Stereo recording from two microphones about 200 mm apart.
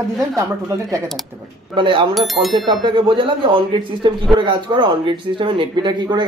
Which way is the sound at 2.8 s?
25° right (ahead or behind).